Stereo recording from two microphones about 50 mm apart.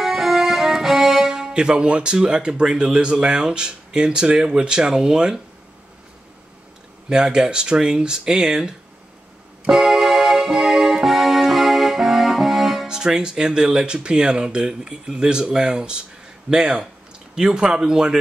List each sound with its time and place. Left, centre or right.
0.0 s speech: centre
7.1 s speech: centre
9.7 s music: centre
16.4 s speech: centre